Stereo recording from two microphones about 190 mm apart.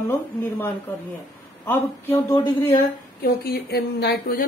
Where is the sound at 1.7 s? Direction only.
15° left (ahead or behind).